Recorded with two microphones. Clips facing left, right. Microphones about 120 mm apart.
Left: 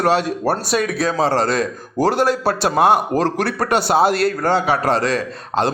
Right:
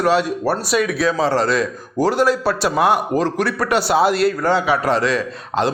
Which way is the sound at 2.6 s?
35° left (ahead or behind).